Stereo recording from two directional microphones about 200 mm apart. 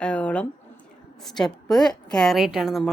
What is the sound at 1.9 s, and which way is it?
Speech, 5° left (ahead or behind).